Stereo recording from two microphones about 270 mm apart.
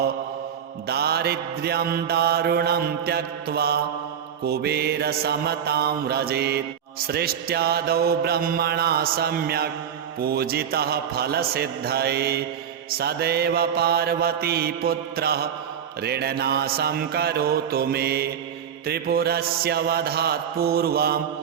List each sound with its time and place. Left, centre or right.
0.9 s mantra: right